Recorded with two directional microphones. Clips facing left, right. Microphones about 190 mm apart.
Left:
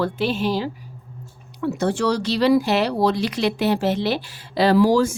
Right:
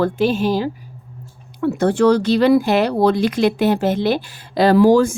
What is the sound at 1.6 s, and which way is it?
Speech, 55° right (ahead or behind).